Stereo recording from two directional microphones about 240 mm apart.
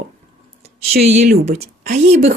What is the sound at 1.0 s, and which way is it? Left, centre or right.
Speech, right.